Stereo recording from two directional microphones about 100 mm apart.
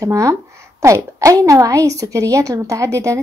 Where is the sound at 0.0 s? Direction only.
35° right (ahead or behind).